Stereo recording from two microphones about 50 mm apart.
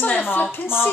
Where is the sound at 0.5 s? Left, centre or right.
Left.